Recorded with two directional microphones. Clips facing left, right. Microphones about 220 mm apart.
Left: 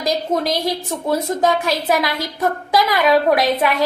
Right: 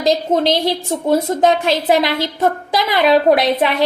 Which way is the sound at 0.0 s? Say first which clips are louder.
Right 4 dB; 25° right (ahead or behind).